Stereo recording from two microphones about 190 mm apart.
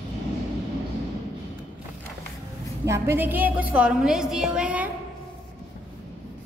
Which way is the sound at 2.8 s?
15° right (ahead or behind).